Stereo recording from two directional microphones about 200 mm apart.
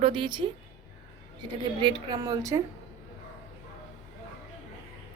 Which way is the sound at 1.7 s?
20° right (ahead or behind).